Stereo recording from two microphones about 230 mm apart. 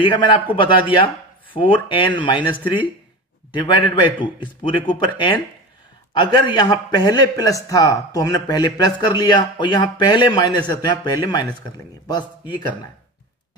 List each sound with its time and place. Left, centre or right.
0.0 s speech: left
3.5 s a man's voice: left